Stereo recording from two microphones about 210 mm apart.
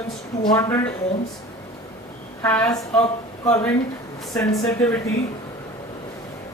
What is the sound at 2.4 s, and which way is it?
A man's voice, 10° left (ahead or behind).